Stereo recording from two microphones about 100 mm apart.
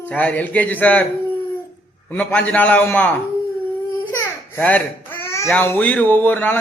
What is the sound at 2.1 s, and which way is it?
Speech, 15° left (ahead or behind).